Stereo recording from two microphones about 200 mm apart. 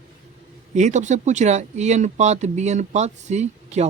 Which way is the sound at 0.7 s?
35° right (ahead or behind).